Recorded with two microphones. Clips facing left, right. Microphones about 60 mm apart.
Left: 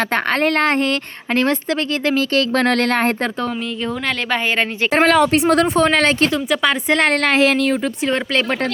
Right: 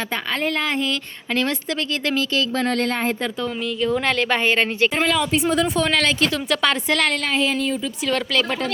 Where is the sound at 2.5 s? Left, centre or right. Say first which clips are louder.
Left 5 dB; left.